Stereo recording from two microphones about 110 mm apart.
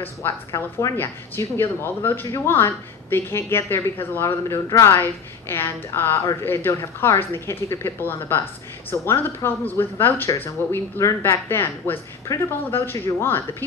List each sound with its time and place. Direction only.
0.0 s speech: 25° left (ahead or behind)